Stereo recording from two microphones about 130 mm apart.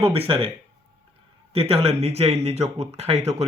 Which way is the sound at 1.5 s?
50° right (ahead or behind).